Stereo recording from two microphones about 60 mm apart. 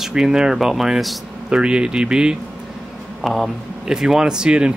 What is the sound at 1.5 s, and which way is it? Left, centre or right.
Speech, centre.